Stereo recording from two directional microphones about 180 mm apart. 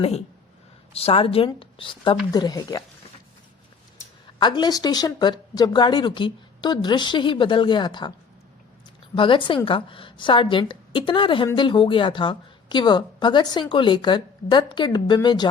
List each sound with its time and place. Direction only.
0.9 s a woman's voice: 30° left (ahead or behind)
4.4 s a woman's voice: 25° left (ahead or behind)
9.1 s a woman's voice: 30° left (ahead or behind)